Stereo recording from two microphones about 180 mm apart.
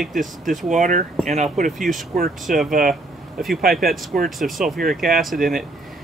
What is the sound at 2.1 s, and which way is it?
Speech, 55° right (ahead or behind).